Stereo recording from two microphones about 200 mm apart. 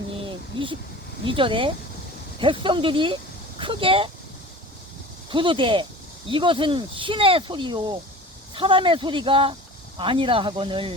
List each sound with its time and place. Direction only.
1.2 s speech: 25° right (ahead or behind)
5.3 s speech: 25° right (ahead or behind)